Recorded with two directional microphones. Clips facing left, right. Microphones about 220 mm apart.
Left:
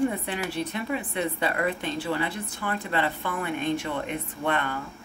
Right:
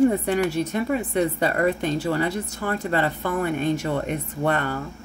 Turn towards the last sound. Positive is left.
turn(degrees=-40)  # may be behind; listen again after turning